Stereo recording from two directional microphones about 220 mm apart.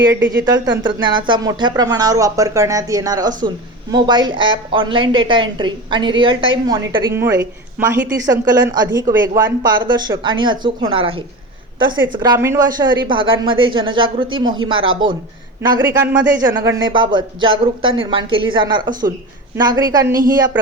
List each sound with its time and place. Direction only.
0.1 s a woman's voice: 15° right (ahead or behind)